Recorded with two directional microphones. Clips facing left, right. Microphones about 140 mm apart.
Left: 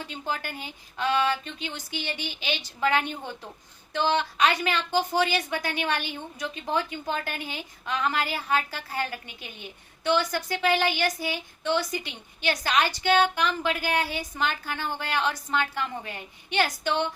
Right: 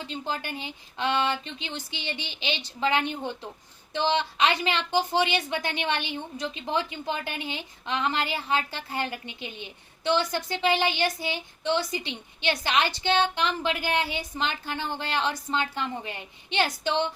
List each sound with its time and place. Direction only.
0.3 s a woman's voice: 20° right (ahead or behind)